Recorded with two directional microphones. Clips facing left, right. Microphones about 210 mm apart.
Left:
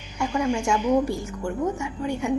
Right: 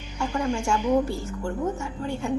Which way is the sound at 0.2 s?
15° left (ahead or behind).